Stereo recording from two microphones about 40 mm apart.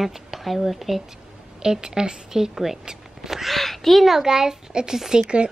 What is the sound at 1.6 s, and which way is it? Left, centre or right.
A woman's voice, centre.